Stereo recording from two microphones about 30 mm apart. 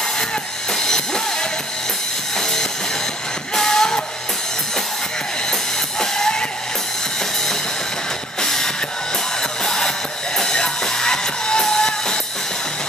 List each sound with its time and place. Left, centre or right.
0.7 s music: centre
2.3 s train: centre
3.5 s music: centre
5.5 s music: centre
8.4 s music: centre